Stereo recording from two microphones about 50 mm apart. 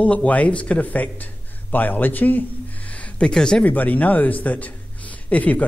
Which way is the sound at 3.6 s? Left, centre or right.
Left.